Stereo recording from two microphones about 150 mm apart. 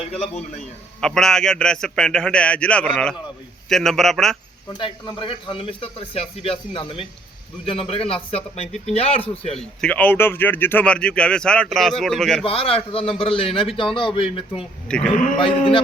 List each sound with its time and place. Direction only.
1.0 s a man's voice: 5° left (ahead or behind)
4.8 s a man's voice: 35° left (ahead or behind)
9.6 s speech: 10° left (ahead or behind)
12.5 s a man's voice: 40° left (ahead or behind)
14.8 s a man's voice: 5° left (ahead or behind)
15.1 s speech: 60° left (ahead or behind)
15.4 s a man's voice: 35° left (ahead or behind)